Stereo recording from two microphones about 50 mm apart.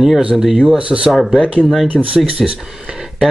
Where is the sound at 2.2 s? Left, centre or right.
Centre.